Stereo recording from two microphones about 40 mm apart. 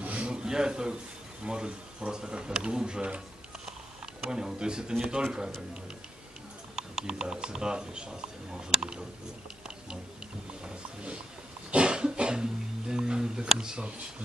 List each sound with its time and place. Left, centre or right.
0.0 s a sound: right
0.3 s a man's voice: centre
4.3 s speech: centre
6.7 s speech: centre
10.6 s wild animals: right
11.7 s cough: right